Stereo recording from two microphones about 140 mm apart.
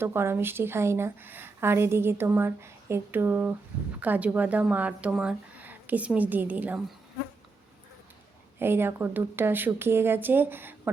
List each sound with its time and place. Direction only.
0.0 s a woman's voice: 15° right (ahead or behind)
8.5 s a woman's voice: 15° right (ahead or behind)